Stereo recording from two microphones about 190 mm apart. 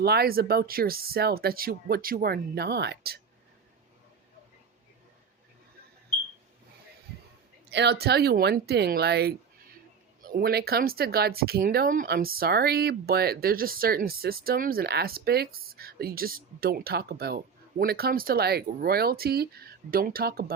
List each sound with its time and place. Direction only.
0.0 s speech: 55° right (ahead or behind)
7.7 s speech: 65° right (ahead or behind)